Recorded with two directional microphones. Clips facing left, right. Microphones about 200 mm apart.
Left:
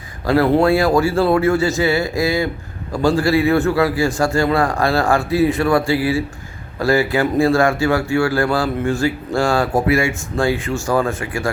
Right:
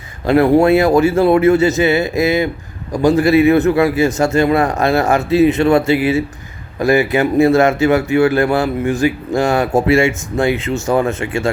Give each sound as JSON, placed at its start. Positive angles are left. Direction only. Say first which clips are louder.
{"t": 0.3, "sound": "speech", "louder": "right 4 dB", "side_deg": -20}